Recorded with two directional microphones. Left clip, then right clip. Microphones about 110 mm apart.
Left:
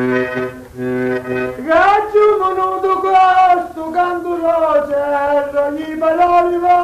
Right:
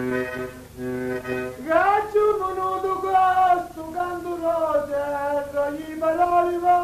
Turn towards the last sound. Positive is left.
turn(degrees=35)  # may be behind; listen again after turning